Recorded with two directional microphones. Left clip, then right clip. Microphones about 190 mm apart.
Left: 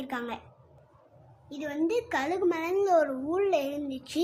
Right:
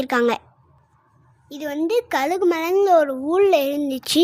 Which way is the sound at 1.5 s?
55° right (ahead or behind).